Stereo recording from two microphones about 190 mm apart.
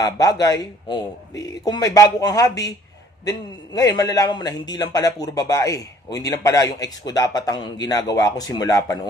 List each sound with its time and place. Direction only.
0.0 s a man's voice: 20° left (ahead or behind)